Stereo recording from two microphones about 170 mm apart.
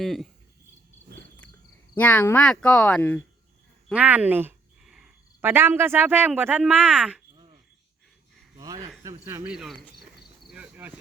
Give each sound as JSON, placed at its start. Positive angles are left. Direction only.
{"t": 0.0, "sound": "speech", "side_deg": 0}
{"t": 2.0, "sound": "speech", "side_deg": 10}
{"t": 3.9, "sound": "speech", "side_deg": -10}
{"t": 8.5, "sound": "a sound", "side_deg": -20}
{"t": 9.0, "sound": "speech", "side_deg": -15}
{"t": 10.5, "sound": "cricket", "side_deg": -10}